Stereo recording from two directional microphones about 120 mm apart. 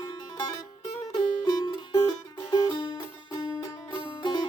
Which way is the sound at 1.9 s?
30° left (ahead or behind).